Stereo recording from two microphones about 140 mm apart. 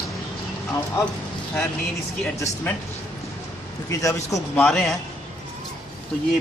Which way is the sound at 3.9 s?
25° left (ahead or behind).